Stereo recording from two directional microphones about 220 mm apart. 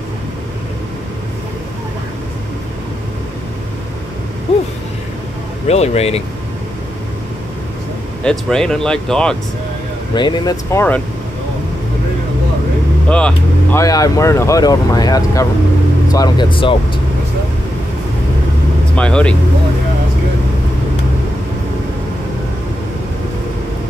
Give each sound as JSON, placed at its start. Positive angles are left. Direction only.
{"t": 5.7, "sound": "speech", "side_deg": 30}
{"t": 8.2, "sound": "speech", "side_deg": 5}
{"t": 10.1, "sound": "speech", "side_deg": 20}
{"t": 13.1, "sound": "speech", "side_deg": 5}
{"t": 18.9, "sound": "speech", "side_deg": 5}